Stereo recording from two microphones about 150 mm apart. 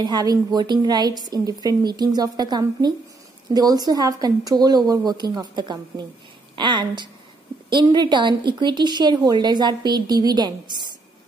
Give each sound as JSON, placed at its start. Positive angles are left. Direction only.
{"t": 0.0, "sound": "a woman's voice", "side_deg": -25}